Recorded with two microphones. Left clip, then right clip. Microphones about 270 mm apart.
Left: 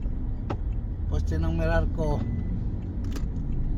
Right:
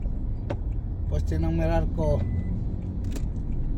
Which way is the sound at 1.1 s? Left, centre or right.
Centre.